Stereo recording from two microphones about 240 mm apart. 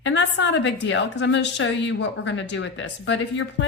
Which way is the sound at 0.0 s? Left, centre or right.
Left.